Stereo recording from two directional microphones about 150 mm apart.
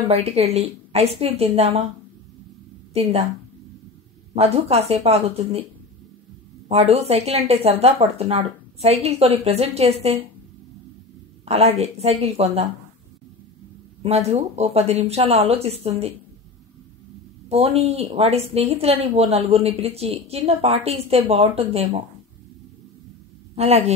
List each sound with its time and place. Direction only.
0.1 s a woman's voice: 45° right (ahead or behind)
2.9 s a woman's voice: 40° right (ahead or behind)
4.4 s a woman's voice: 45° right (ahead or behind)
6.7 s a woman's voice: 45° right (ahead or behind)
11.4 s a woman's voice: 45° right (ahead or behind)
14.0 s a woman's voice: 45° right (ahead or behind)
17.5 s a woman's voice: 45° right (ahead or behind)
23.5 s a woman's voice: 40° right (ahead or behind)